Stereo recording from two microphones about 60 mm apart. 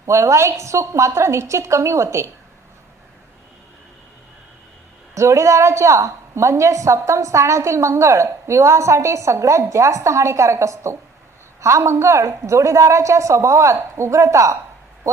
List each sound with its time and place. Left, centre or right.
0.0 s a woman's voice: right
5.1 s a woman's voice: right